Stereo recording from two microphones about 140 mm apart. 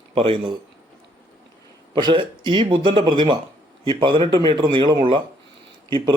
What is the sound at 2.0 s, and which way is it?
A man's voice, 35° right (ahead or behind).